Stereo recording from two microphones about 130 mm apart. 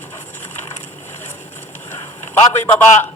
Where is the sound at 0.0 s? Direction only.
15° left (ahead or behind).